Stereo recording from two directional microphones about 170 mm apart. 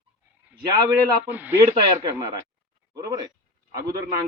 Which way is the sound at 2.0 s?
25° right (ahead or behind).